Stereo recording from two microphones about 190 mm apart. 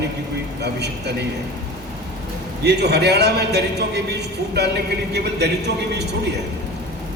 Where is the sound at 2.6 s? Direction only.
60° right (ahead or behind).